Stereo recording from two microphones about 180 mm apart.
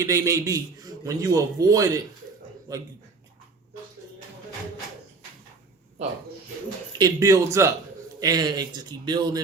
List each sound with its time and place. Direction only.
0.0 s a man's voice: 15° right (ahead or behind)
7.0 s a man's voice: 15° right (ahead or behind)